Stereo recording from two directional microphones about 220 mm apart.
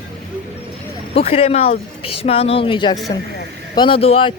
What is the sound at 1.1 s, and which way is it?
A woman's voice, 25° left (ahead or behind).